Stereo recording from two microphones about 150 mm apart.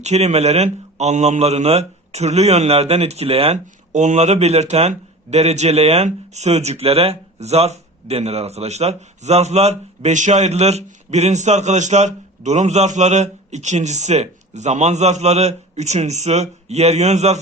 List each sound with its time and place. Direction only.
0.0 s a man's voice: 45° right (ahead or behind)